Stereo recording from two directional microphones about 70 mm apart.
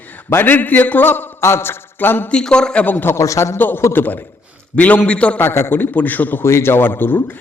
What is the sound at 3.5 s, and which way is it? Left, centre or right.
A man's voice, left.